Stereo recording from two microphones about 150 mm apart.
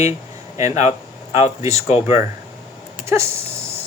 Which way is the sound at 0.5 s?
20° right (ahead or behind).